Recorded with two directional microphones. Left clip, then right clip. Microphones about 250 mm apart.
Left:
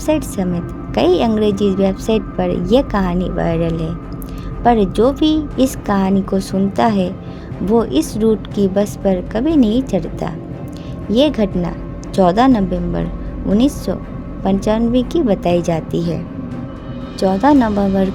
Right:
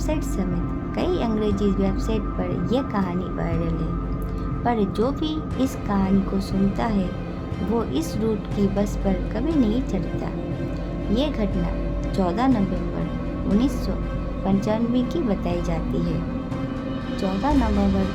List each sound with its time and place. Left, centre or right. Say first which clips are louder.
0.0 s a woman's voice: left 9 dB; left
17.2 s a woman's voice: left 11 dB; left